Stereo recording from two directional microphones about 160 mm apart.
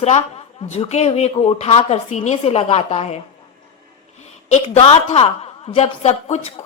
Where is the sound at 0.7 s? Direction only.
45° left (ahead or behind).